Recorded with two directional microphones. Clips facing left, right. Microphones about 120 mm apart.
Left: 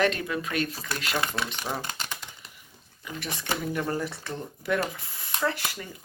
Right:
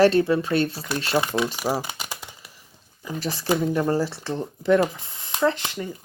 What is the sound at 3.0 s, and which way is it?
Speech, 30° right (ahead or behind).